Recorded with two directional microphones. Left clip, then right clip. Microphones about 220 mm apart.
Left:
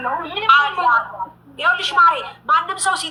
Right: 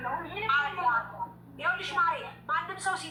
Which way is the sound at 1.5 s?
50° left (ahead or behind).